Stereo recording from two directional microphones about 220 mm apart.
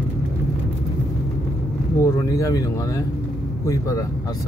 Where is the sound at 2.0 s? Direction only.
15° left (ahead or behind).